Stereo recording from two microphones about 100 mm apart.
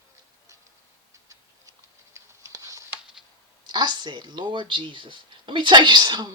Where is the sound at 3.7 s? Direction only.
45° right (ahead or behind).